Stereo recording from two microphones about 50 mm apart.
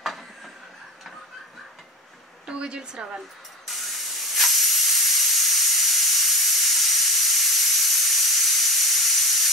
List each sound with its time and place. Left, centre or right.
2.4 s speech: centre
3.6 s steam: centre